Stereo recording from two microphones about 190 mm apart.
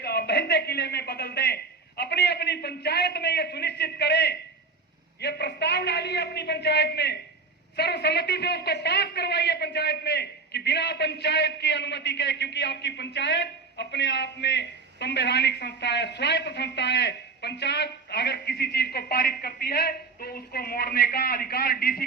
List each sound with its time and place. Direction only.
0.0 s a man's voice: 60° left (ahead or behind)